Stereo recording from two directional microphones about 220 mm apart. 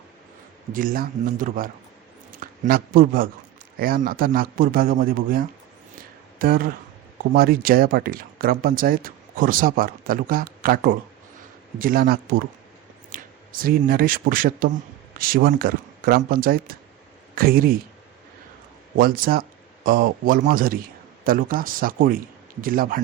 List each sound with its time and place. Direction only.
0.7 s speech: 40° right (ahead or behind)
6.0 s a sound: 40° right (ahead or behind)
7.3 s speech: 45° right (ahead or behind)
18.9 s speech: 40° right (ahead or behind)